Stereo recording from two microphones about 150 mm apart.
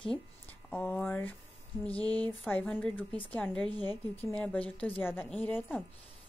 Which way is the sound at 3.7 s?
30° right (ahead or behind).